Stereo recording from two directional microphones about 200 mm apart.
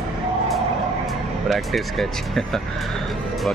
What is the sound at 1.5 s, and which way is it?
Speech, centre (ahead or behind).